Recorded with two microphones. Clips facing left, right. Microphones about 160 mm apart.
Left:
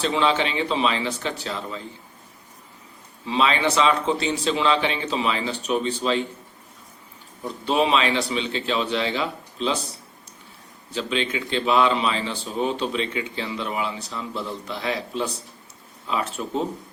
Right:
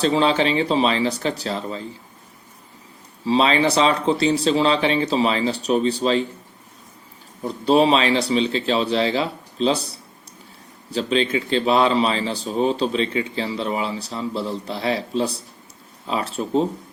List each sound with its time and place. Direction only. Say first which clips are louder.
0.0 s a man's voice: right 4 dB; 35° right (ahead or behind)
3.2 s a man's voice: right 4 dB; 35° right (ahead or behind)
7.4 s a man's voice: right 6 dB; 35° right (ahead or behind)